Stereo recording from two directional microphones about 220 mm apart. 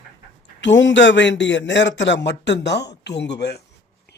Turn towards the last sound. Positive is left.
turn(degrees=50)  # may be behind; listen again after turning